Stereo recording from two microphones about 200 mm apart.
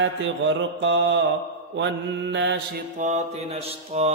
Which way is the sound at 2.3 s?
60° right (ahead or behind).